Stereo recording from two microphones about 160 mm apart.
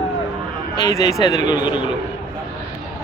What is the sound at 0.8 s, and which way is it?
Speech, 20° left (ahead or behind).